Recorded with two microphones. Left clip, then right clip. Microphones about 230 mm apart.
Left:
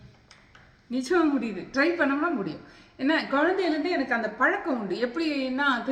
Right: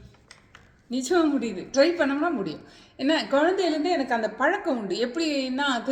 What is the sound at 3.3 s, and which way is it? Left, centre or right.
Speech, centre.